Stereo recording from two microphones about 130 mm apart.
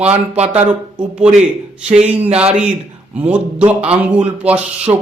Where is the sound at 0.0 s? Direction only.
55° right (ahead or behind).